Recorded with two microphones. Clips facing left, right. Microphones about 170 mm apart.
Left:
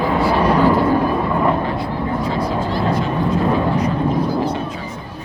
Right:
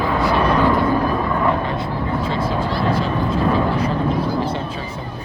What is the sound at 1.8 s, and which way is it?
Vehicle, 25° right (ahead or behind).